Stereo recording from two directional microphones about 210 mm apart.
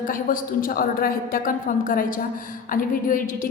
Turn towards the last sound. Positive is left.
turn(degrees=40)  # may be behind; listen again after turning